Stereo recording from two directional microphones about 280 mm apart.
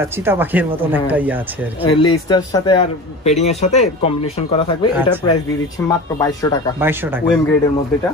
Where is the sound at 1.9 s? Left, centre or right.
Centre.